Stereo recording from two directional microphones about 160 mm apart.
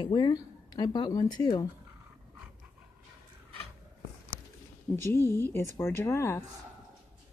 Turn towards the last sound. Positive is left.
turn(degrees=15)  # may be behind; listen again after turning